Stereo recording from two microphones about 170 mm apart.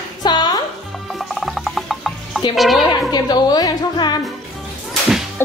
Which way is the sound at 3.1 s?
25° left (ahead or behind).